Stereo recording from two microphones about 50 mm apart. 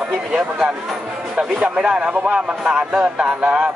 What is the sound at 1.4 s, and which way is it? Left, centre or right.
A man's voice, centre.